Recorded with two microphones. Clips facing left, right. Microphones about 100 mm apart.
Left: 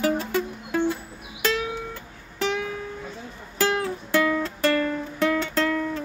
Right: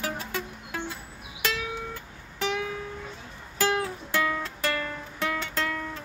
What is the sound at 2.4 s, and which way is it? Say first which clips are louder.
Music: left 3 dB; 5° right (ahead or behind).